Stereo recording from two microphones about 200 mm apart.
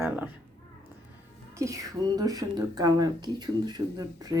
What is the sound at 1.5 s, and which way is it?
Speech, 15° right (ahead or behind).